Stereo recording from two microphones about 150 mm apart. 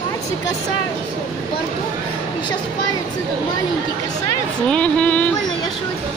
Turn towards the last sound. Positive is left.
turn(degrees=10)  # may be behind; listen again after turning